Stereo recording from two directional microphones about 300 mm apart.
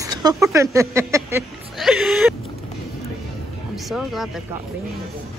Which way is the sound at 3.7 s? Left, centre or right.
Centre.